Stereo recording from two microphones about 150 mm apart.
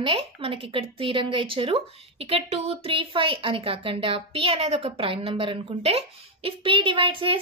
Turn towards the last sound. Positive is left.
turn(degrees=-35)  # may be behind; listen again after turning